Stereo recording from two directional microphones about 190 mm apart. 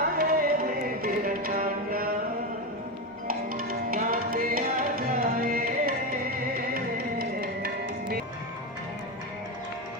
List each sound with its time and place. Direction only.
0.0 s music: 50° right (ahead or behind)
3.2 s music: 50° right (ahead or behind)